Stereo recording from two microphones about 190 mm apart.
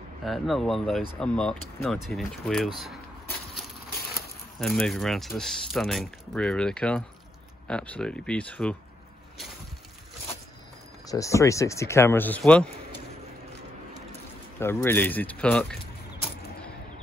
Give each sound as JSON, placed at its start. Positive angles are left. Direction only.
{"t": 0.2, "sound": "speech", "side_deg": 0}
{"t": 4.6, "sound": "speech", "side_deg": 5}
{"t": 11.1, "sound": "speech", "side_deg": 15}
{"t": 14.6, "sound": "speech", "side_deg": 10}